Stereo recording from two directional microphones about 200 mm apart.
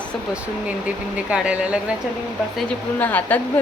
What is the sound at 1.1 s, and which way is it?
Speech, 5° right (ahead or behind).